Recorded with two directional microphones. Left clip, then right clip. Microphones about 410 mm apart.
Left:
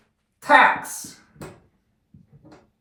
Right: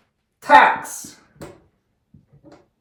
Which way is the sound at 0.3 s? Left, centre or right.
Centre.